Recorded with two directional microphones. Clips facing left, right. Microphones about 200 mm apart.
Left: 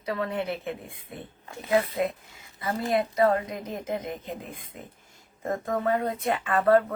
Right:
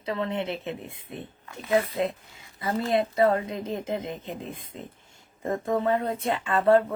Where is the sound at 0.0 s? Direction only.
25° right (ahead or behind).